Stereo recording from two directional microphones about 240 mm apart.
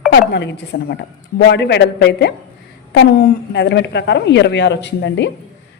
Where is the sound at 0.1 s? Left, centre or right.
Left.